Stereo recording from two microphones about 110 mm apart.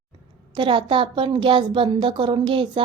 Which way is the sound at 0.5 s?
50° right (ahead or behind).